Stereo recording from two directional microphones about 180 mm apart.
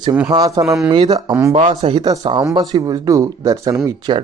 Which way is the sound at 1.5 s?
35° right (ahead or behind).